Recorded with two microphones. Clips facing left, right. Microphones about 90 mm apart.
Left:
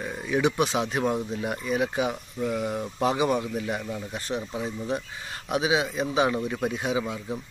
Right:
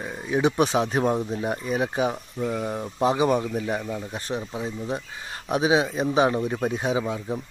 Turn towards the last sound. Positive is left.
turn(degrees=-25)  # may be behind; listen again after turning